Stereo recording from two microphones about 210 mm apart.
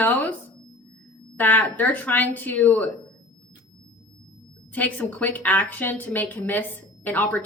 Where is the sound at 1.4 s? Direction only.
10° left (ahead or behind).